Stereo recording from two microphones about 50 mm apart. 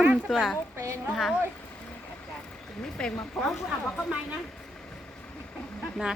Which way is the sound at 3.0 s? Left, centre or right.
Left.